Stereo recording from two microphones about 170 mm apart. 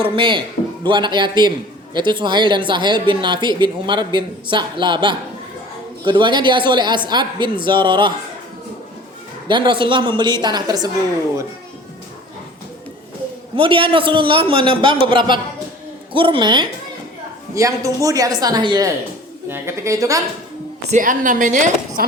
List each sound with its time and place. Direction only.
0.0 s a man's voice: 30° right (ahead or behind)
9.5 s a man's voice: 25° right (ahead or behind)
13.6 s a man's voice: 30° right (ahead or behind)
20.9 s a woman's voice: 50° right (ahead or behind)